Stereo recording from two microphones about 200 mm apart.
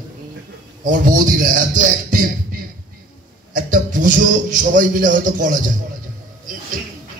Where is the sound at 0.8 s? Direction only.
40° right (ahead or behind).